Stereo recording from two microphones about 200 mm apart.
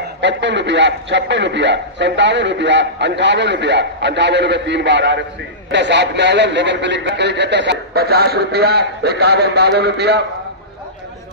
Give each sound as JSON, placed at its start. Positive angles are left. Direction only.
{"t": 0.2, "sound": "a man's voice", "side_deg": -60}